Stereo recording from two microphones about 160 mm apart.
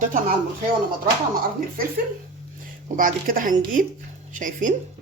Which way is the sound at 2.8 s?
60° right (ahead or behind).